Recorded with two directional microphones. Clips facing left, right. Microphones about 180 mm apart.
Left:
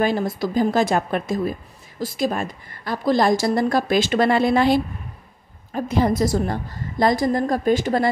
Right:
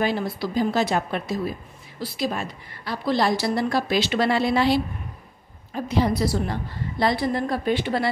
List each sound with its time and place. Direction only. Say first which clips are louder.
0.0 s a woman's voice: left 3 dB; 45° left (ahead or behind)